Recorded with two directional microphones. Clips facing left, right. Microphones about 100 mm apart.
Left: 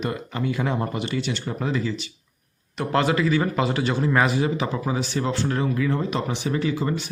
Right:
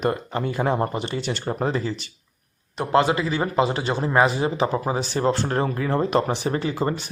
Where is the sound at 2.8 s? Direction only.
25° right (ahead or behind).